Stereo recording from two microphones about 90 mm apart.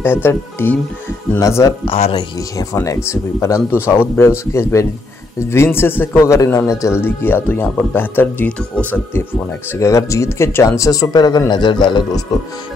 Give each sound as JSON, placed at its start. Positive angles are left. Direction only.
{"t": 0.0, "sound": "speech", "side_deg": 25}
{"t": 1.4, "sound": "speech", "side_deg": 35}
{"t": 1.9, "sound": "speech", "side_deg": 85}
{"t": 2.5, "sound": "speech", "side_deg": 35}
{"t": 7.0, "sound": "speech", "side_deg": 25}
{"t": 9.8, "sound": "speech", "side_deg": 35}